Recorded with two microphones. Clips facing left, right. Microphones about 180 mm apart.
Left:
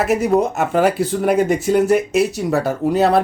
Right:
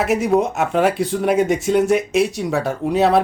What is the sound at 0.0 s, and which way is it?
Speech, centre (ahead or behind).